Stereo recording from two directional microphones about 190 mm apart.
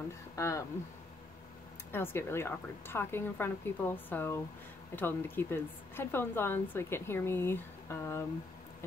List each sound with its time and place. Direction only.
0.4 s a woman's voice: 15° left (ahead or behind)
1.9 s a woman's voice: 10° left (ahead or behind)